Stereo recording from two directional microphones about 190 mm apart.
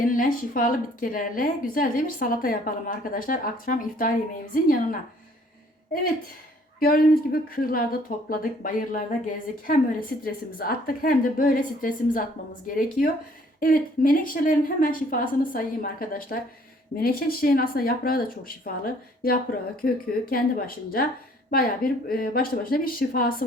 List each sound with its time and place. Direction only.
0.0 s a woman's voice: 45° left (ahead or behind)
6.7 s a woman's voice: 50° left (ahead or behind)